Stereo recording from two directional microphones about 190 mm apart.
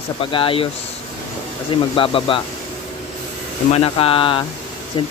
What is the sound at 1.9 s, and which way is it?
Speech, 25° left (ahead or behind).